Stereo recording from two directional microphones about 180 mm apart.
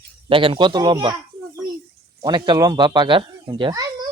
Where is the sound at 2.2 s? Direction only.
25° right (ahead or behind).